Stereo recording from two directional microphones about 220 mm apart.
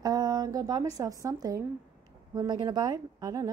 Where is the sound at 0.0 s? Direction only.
15° right (ahead or behind).